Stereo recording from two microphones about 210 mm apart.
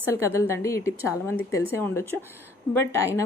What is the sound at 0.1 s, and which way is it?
A woman's voice, 10° left (ahead or behind).